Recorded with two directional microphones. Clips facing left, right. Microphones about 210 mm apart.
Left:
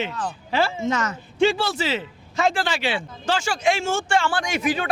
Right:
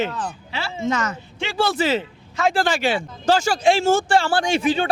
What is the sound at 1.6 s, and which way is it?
Speech, 55° right (ahead or behind).